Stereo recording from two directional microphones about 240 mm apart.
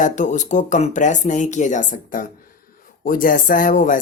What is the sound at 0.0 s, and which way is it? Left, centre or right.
Speech, left.